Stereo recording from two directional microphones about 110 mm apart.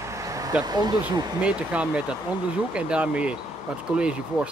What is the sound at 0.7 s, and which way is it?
Speech, 40° right (ahead or behind).